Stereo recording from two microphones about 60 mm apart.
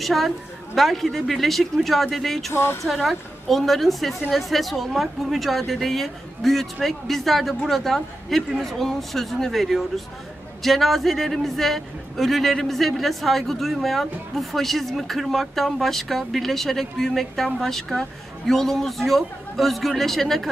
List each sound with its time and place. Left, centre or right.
0.0 s a woman's voice: centre
2.5 s speech: left
2.8 s a man's voice: centre